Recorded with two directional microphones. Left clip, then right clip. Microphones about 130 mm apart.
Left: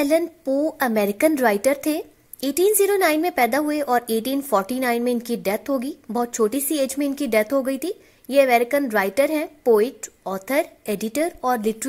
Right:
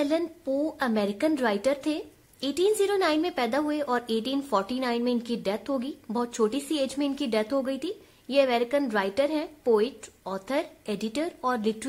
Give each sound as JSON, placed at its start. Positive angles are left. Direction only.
{"t": 0.0, "sound": "a woman's voice", "side_deg": 45}